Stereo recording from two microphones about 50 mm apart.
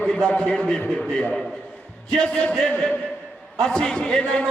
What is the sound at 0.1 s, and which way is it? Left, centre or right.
Speech, centre.